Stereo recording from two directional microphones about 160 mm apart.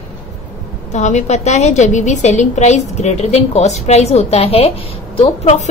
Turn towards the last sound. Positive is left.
turn(degrees=45)  # may be behind; listen again after turning